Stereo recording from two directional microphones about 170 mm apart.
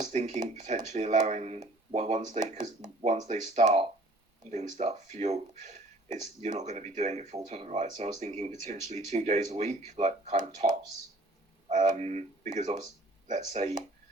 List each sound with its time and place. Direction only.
0.0 s speech: 45° right (ahead or behind)